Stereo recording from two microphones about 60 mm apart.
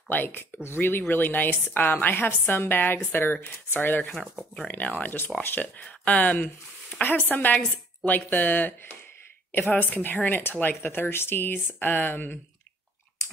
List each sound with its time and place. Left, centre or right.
0.1 s a woman's voice: left